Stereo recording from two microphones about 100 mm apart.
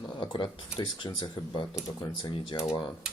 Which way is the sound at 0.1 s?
50° left (ahead or behind).